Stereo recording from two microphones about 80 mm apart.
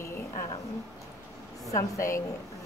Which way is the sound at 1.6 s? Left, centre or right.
Left.